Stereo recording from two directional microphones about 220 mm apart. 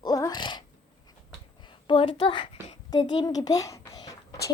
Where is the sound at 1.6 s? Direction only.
20° left (ahead or behind).